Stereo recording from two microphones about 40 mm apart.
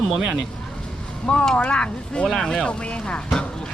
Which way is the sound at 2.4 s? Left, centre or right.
Centre.